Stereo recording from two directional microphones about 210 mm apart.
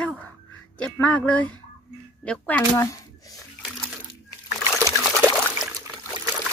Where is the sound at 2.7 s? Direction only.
15° left (ahead or behind).